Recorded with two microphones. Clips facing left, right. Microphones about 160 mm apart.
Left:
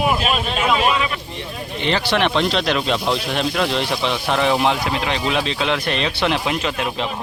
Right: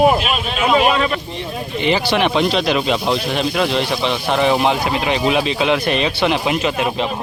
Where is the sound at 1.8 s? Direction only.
5° right (ahead or behind).